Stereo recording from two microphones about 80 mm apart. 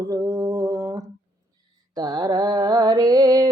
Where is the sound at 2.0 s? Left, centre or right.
Right.